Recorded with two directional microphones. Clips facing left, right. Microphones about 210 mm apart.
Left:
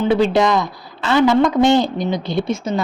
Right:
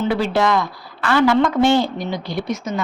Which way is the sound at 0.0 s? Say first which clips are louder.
Left 4 dB; 20° left (ahead or behind).